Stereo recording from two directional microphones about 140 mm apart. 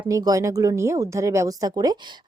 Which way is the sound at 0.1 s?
25° right (ahead or behind).